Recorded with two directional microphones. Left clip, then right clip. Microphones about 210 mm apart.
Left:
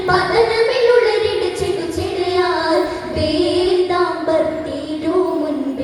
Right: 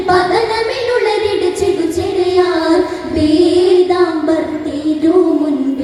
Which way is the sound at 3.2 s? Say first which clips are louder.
Right 6 dB; 30° right (ahead or behind).